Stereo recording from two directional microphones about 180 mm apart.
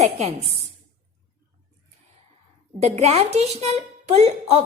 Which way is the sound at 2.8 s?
40° right (ahead or behind).